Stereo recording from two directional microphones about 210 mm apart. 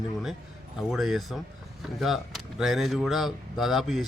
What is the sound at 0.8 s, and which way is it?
Speech, centre (ahead or behind).